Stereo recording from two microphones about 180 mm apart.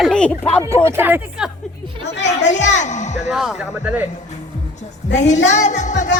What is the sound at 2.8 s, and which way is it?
Speech, 40° left (ahead or behind).